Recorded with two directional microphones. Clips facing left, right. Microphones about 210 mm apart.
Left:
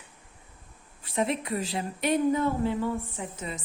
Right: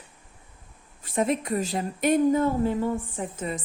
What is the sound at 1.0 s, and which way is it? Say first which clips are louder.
A woman's voice: right 3 dB; 45° right (ahead or behind).